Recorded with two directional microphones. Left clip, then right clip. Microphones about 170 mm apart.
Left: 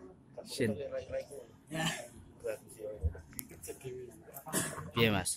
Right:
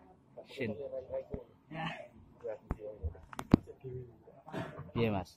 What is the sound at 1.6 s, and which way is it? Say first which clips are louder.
Speech: left 5 dB; centre (ahead or behind).